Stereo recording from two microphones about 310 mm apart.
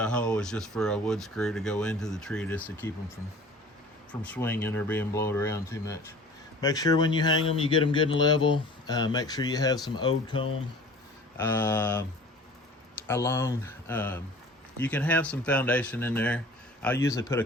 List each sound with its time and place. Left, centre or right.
0.0 s speech: centre
4.1 s speech: centre
13.1 s speech: centre